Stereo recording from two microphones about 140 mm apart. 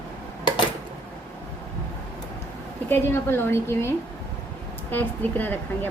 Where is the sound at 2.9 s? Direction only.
15° left (ahead or behind).